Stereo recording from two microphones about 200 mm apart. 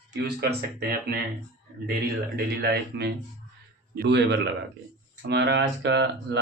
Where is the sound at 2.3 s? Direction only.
50° right (ahead or behind).